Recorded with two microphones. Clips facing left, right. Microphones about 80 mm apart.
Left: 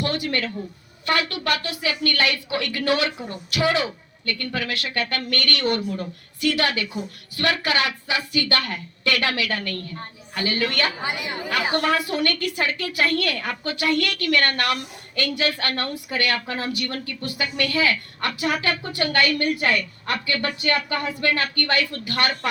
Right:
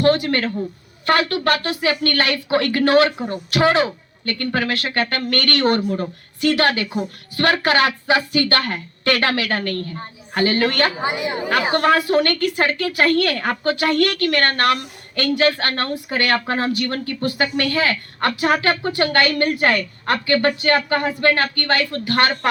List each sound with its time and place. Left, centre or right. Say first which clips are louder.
0.0 s a woman's voice: right 8 dB; right
11.0 s a woman's voice: right 6 dB; right
11.7 s a woman's voice: right 7 dB; right